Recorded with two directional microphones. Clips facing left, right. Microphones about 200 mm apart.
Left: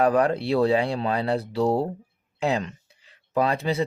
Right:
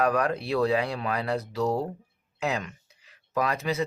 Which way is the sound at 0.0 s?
30° left (ahead or behind).